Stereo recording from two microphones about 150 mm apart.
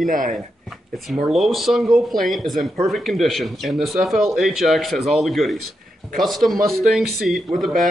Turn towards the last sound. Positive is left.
turn(degrees=0)  # may be behind; listen again after turning